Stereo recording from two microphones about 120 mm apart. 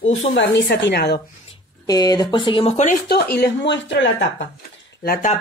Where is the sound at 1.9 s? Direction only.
35° left (ahead or behind).